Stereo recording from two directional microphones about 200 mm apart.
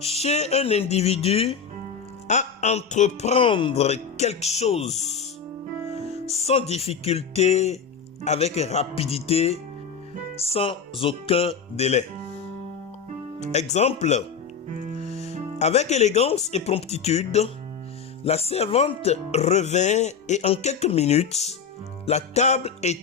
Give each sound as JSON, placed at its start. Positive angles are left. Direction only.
{"t": 0.0, "sound": "speech", "side_deg": 30}
{"t": 6.2, "sound": "speech", "side_deg": 30}
{"t": 13.4, "sound": "speech", "side_deg": 35}
{"t": 14.8, "sound": "music", "side_deg": -40}
{"t": 15.5, "sound": "speech", "side_deg": 35}